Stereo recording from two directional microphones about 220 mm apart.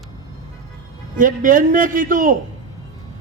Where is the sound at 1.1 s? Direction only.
35° right (ahead or behind).